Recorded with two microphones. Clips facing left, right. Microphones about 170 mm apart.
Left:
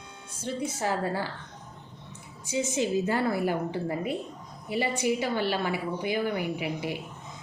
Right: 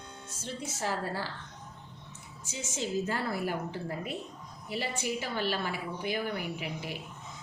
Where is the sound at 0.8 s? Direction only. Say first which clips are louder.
Left 3 dB; 15° left (ahead or behind).